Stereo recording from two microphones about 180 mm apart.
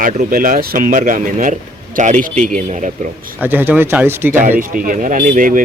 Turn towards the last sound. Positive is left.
turn(degrees=-50)  # may be behind; listen again after turning